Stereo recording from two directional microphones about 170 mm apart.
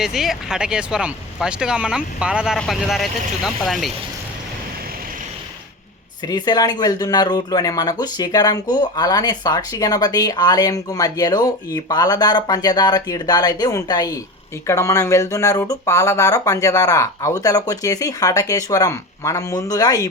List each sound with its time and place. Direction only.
0.0 s speech: centre (ahead or behind)
6.2 s speech: 25° left (ahead or behind)